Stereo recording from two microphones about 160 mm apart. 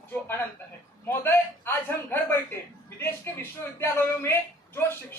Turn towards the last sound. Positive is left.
turn(degrees=15)  # may be behind; listen again after turning